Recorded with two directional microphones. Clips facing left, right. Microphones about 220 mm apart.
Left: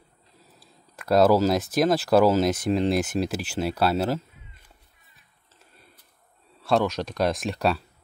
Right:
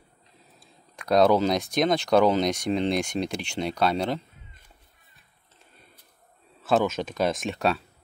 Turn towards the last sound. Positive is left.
turn(degrees=0)  # may be behind; listen again after turning